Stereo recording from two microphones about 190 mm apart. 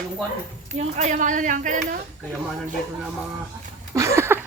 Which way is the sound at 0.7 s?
35° right (ahead or behind).